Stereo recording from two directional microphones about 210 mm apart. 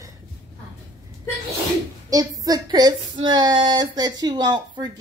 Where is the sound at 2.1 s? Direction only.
15° right (ahead or behind).